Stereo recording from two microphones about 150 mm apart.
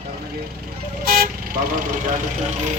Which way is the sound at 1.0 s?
75° right (ahead or behind).